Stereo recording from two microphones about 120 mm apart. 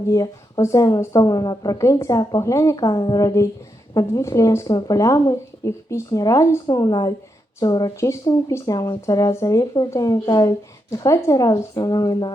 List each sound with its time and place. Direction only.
0.1 s a woman's voice: 30° left (ahead or behind)